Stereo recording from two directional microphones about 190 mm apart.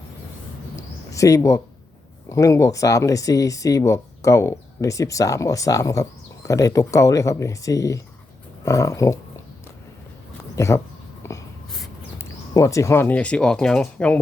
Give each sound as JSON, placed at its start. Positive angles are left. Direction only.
{"t": 1.1, "sound": "speech", "side_deg": 15}
{"t": 10.5, "sound": "speech", "side_deg": 15}
{"t": 11.2, "sound": "wheeze", "side_deg": 15}
{"t": 12.2, "sound": "speech", "side_deg": 15}